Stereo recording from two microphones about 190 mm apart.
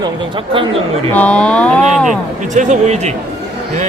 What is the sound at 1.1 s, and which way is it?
Speech, 5° left (ahead or behind).